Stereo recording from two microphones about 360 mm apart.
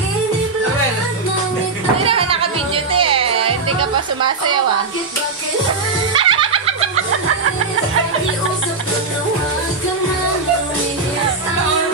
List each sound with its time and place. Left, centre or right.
2.0 s music: centre
3.6 s music: right
6.1 s music: centre
7.1 s music: right